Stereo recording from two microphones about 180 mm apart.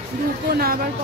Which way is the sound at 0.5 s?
55° right (ahead or behind).